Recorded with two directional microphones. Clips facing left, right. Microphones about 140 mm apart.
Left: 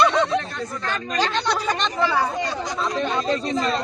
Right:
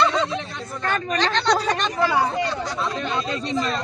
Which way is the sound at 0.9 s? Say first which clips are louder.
Right 4 dB; 55° right (ahead or behind).